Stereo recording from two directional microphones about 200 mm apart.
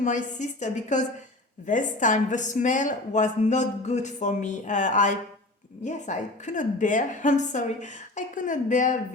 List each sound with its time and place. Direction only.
0.0 s a woman's voice: 40° left (ahead or behind)